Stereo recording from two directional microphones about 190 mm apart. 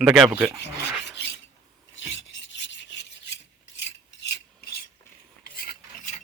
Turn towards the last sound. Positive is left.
turn(degrees=45)  # may be behind; listen again after turning